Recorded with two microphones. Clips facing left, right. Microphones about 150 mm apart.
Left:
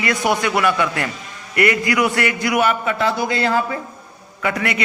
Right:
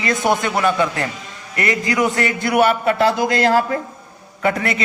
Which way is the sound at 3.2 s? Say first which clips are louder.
Right 3 dB; 90° right.